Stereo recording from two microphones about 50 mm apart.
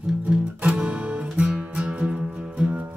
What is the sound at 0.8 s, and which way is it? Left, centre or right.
Music, right.